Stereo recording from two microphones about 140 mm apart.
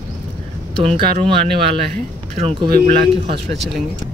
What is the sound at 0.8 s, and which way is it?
Speech, 50° right (ahead or behind).